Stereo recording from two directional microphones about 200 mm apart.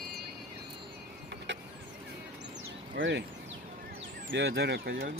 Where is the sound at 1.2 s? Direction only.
60° right (ahead or behind).